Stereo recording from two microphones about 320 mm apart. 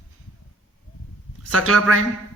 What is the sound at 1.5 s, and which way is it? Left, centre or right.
Speech, right.